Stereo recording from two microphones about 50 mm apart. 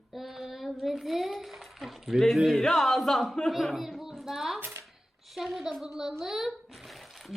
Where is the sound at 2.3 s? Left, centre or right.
Centre.